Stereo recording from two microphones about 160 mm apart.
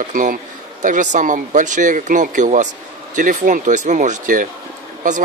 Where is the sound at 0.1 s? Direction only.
60° right (ahead or behind).